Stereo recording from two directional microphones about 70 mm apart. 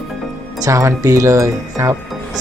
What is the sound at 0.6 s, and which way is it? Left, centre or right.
Speech, right.